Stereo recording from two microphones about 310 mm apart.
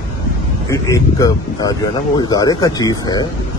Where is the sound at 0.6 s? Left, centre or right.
Centre.